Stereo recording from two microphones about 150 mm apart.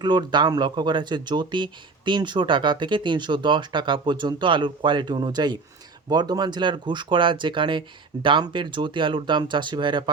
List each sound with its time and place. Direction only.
0.0 s speech: 30° right (ahead or behind)